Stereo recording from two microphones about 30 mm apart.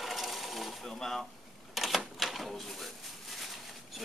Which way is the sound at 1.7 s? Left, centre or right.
Centre.